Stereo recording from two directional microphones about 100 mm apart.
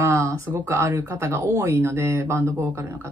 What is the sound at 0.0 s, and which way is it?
Speech, 30° right (ahead or behind).